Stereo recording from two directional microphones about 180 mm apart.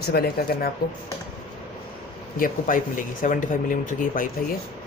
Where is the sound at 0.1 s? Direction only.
60° left (ahead or behind).